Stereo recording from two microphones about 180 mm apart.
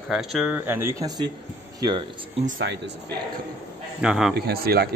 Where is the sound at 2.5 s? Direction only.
75° right (ahead or behind).